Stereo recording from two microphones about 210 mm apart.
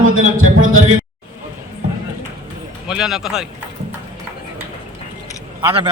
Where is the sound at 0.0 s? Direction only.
75° right (ahead or behind).